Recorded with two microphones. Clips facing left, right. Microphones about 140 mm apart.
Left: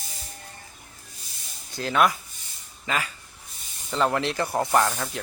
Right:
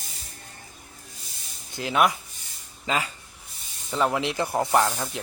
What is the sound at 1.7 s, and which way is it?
Speech, 15° right (ahead or behind).